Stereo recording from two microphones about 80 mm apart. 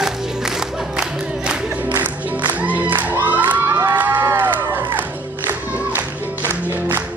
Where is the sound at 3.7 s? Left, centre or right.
Right.